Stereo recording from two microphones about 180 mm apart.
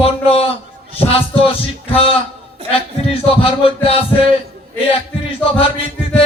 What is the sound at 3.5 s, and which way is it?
Speech, 30° left (ahead or behind).